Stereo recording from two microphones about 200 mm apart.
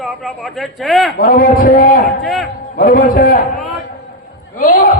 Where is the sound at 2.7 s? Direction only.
45° left (ahead or behind).